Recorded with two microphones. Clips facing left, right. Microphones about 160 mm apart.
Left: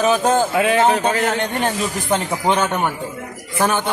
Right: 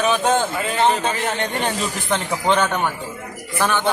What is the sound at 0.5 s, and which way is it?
Speech, 80° left.